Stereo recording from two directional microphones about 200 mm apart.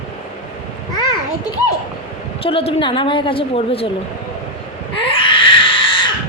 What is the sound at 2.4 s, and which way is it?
Speech, 30° left (ahead or behind).